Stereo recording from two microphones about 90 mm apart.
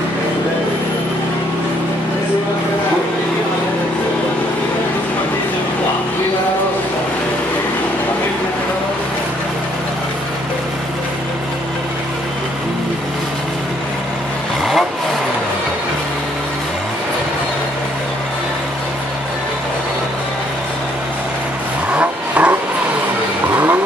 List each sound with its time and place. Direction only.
14.6 s vehicle: centre (ahead or behind)
21.9 s vehicle: 15° right (ahead or behind)
23.5 s vehicle: 25° right (ahead or behind)